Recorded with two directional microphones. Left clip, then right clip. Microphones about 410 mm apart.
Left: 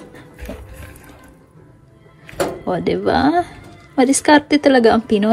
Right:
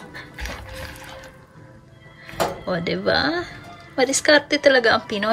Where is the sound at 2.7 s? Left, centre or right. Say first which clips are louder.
Left 4 dB; centre.